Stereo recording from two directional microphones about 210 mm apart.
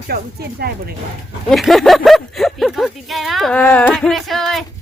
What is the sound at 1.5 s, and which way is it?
Speech, centre (ahead or behind).